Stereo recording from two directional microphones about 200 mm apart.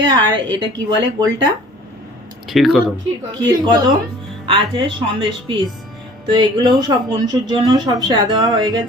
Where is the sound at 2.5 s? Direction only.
Centre (ahead or behind).